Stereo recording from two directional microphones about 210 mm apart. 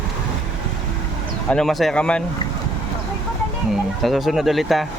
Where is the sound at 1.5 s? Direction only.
Centre (ahead or behind).